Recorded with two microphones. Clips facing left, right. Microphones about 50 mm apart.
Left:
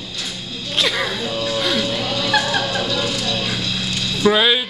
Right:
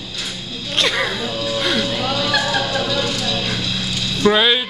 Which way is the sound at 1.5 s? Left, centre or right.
Centre.